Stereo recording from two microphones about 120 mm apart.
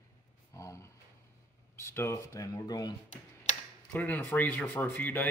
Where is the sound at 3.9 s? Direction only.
15° left (ahead or behind).